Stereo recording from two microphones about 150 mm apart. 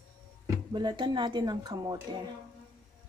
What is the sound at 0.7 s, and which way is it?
A woman's voice, 30° right (ahead or behind).